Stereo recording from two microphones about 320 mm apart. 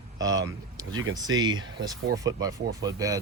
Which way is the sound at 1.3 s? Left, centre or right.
Centre.